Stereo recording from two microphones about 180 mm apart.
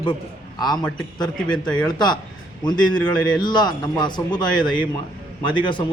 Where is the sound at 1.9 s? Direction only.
25° left (ahead or behind).